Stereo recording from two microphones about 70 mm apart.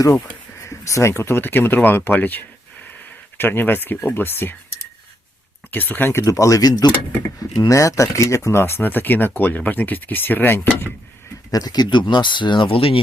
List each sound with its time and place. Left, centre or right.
0.6 s speech: left
5.7 s speech: left
11.5 s speech: left